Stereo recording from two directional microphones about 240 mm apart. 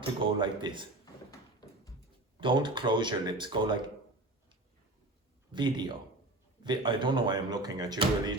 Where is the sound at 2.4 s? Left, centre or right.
Centre.